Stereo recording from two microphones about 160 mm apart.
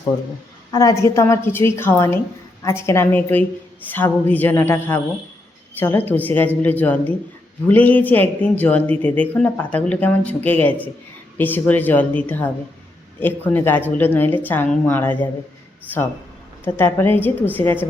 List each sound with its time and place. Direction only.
0.7 s a woman's voice: 25° left (ahead or behind)
16.6 s speech: 15° left (ahead or behind)